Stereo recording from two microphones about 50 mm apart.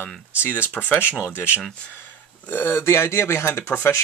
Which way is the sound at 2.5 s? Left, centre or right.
Left.